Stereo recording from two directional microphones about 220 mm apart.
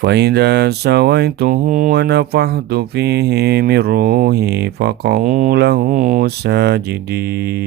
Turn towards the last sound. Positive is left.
turn(degrees=-45)  # may be behind; listen again after turning